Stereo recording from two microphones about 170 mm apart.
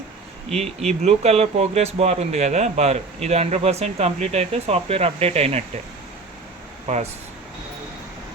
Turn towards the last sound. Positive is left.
turn(degrees=-40)  # may be behind; listen again after turning